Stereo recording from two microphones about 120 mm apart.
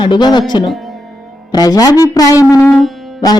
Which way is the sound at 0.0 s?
40° left (ahead or behind).